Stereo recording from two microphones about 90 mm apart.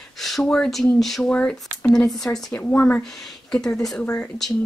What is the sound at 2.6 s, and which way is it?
Speech, 15° left (ahead or behind).